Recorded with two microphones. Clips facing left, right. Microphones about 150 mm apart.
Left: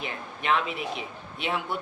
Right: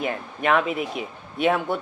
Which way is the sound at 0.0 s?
50° right (ahead or behind).